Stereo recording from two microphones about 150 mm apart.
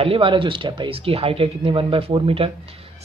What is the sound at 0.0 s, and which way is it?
Speech, 35° right (ahead or behind).